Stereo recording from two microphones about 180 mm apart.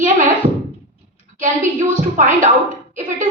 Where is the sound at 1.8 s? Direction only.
45° right (ahead or behind).